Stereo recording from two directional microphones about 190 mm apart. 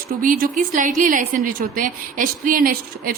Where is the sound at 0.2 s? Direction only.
45° right (ahead or behind).